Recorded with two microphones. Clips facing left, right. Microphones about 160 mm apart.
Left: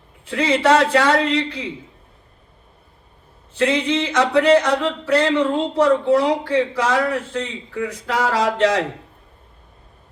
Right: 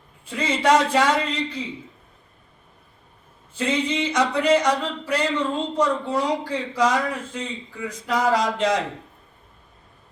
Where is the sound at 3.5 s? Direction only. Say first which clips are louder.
Left 5 dB; 80° left.